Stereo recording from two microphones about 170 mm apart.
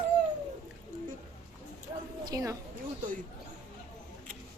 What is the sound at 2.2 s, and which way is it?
Speech, 20° right (ahead or behind).